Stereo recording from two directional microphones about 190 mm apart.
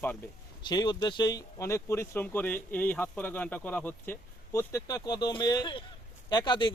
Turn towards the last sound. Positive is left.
turn(degrees=25)  # may be behind; listen again after turning